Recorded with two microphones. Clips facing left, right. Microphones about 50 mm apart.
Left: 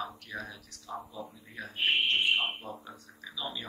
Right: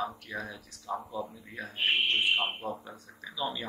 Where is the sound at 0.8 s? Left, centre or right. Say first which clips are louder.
Right 5 dB; right.